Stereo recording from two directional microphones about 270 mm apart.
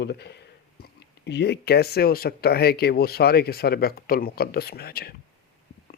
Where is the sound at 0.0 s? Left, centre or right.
Left.